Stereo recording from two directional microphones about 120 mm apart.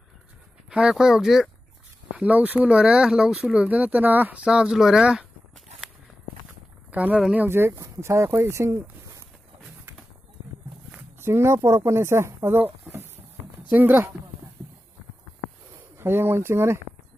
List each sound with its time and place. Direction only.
0.7 s speech: 10° right (ahead or behind)
6.9 s speech: 10° right (ahead or behind)
10.9 s speech: 20° right (ahead or behind)
16.0 s speech: 20° right (ahead or behind)